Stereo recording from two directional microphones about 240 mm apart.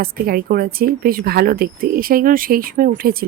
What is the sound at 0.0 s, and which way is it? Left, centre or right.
Speech, right.